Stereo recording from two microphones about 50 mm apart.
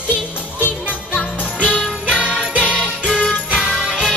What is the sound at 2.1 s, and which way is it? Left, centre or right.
Jingle bell, centre.